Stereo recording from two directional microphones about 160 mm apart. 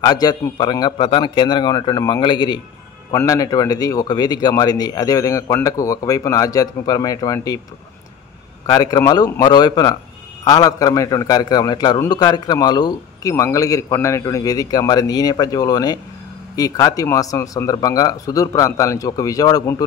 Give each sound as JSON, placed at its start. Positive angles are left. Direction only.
{"t": 0.0, "sound": "a man's voice", "side_deg": 25}
{"t": 8.6, "sound": "a man's voice", "side_deg": 25}